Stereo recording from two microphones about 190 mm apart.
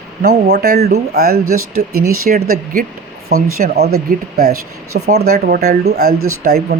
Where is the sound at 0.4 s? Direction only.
60° right (ahead or behind).